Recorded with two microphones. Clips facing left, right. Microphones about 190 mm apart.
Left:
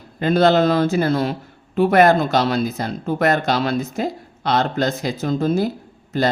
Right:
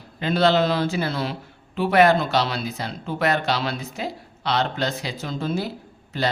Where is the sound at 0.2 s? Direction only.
50° left (ahead or behind).